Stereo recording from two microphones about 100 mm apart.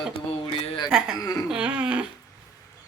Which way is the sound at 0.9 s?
5° right (ahead or behind).